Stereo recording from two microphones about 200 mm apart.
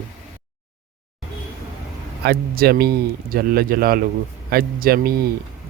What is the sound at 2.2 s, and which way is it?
Speech, 50° right (ahead or behind).